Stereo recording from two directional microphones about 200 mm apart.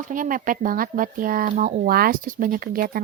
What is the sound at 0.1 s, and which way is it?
Speech, 45° right (ahead or behind).